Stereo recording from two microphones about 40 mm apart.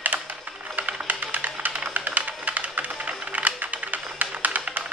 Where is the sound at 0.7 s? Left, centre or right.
Right.